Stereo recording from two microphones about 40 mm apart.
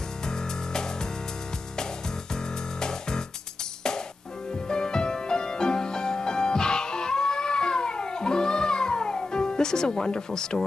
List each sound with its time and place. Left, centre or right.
0.3 s music: centre
2.8 s music: centre
4.6 s music: centre